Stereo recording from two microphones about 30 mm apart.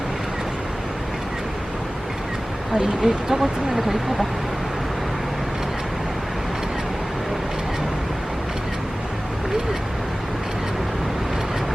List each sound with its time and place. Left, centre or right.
3.0 s speech: centre
3.8 s speech: centre